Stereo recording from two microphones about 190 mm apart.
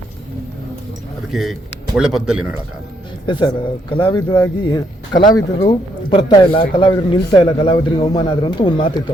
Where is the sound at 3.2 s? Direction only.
25° left (ahead or behind).